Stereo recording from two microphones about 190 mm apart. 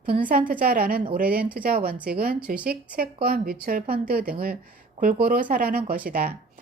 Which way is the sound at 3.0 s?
50° right (ahead or behind).